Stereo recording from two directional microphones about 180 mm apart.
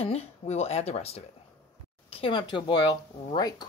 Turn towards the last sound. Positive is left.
turn(degrees=20)  # may be behind; listen again after turning